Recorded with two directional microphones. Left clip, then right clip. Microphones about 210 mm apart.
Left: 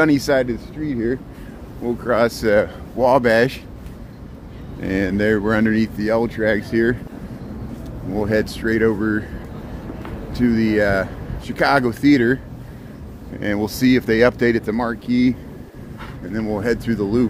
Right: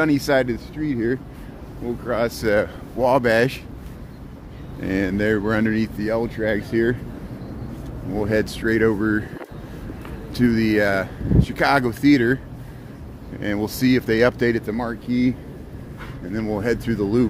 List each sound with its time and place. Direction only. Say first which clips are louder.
0.0 s speech: left 4 dB; centre (ahead or behind)
0.3 s speech: left 1 dB; 20° right (ahead or behind)
1.9 s speech: left 5 dB; 20° left (ahead or behind)
2.4 s speech: left 3 dB; centre (ahead or behind)
4.7 s speech: left 2 dB; 10° right (ahead or behind)
8.1 s speech: left 2 dB; 15° right (ahead or behind)
10.3 s speech: left 1 dB; 25° right (ahead or behind); by 12.4 s 5° right (ahead or behind)
13.4 s speech: left 3 dB; centre (ahead or behind)
16.3 s speech: left 2 dB; 20° right (ahead or behind)